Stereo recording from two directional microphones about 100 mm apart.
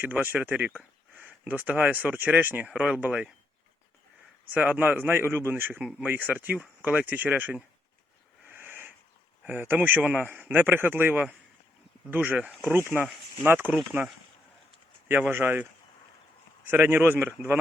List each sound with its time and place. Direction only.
0.0 s speech: 20° right (ahead or behind)
4.5 s a man's voice: 15° right (ahead or behind)
8.4 s a sound: 20° right (ahead or behind)
9.4 s a man's voice: 15° right (ahead or behind)
16.6 s a man's voice: 20° right (ahead or behind)